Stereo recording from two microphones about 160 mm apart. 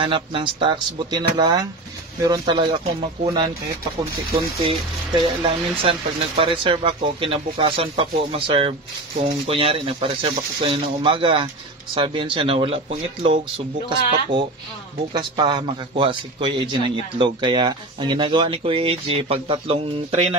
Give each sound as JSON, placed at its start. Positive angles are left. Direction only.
{"t": 0.0, "sound": "a man's voice", "side_deg": -30}
{"t": 4.6, "sound": "speech", "side_deg": -35}
{"t": 15.1, "sound": "a man's voice", "side_deg": -30}